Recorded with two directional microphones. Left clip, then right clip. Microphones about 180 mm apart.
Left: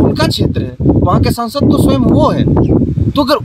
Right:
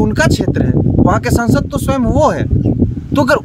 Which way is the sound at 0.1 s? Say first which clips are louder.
Even; 10° right (ahead or behind).